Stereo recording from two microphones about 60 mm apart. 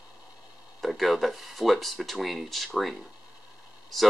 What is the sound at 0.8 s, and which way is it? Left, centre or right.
Speech, centre.